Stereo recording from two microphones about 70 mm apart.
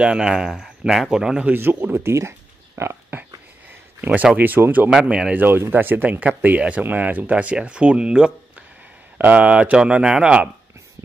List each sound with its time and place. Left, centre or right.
0.0 s speech: centre
1.5 s speech: right
2.1 s a sound: right
4.0 s speech: right
5.6 s speech: right